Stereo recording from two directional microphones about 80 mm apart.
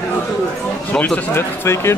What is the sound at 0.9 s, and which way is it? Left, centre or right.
Speech, centre.